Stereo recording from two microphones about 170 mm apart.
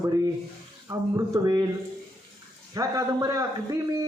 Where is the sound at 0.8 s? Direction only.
20° right (ahead or behind).